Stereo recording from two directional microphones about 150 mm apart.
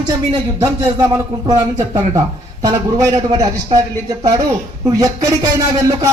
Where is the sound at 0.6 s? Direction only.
25° right (ahead or behind).